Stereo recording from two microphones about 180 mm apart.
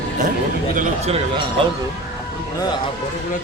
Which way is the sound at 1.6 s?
25° right (ahead or behind).